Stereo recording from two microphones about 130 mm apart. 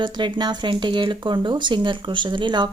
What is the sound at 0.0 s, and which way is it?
A woman's voice, 35° right (ahead or behind).